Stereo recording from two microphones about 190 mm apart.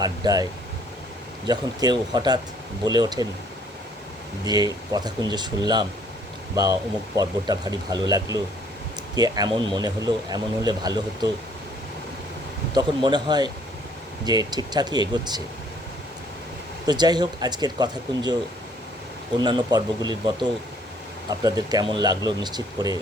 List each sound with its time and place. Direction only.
0.0 s speech: 20° right (ahead or behind)
1.5 s speech: 20° right (ahead or behind)
4.4 s speech: 20° right (ahead or behind)
7.2 s speech: 20° right (ahead or behind)
12.7 s speech: 25° right (ahead or behind)
16.8 s speech: 20° right (ahead or behind)
19.4 s speech: 20° right (ahead or behind)